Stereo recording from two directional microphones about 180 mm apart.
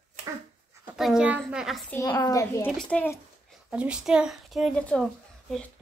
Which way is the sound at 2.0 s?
20° left (ahead or behind).